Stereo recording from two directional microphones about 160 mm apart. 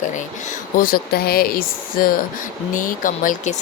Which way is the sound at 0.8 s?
65° left (ahead or behind).